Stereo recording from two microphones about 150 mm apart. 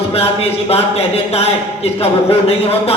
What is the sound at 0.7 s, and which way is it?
Speech, 40° left (ahead or behind).